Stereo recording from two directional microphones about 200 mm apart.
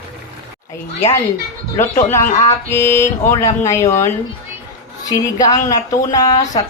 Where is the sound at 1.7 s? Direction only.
15° left (ahead or behind).